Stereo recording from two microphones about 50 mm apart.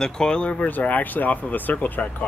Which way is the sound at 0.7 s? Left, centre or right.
Left.